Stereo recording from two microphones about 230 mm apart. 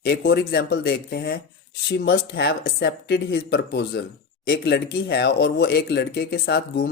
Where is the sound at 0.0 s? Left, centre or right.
Left.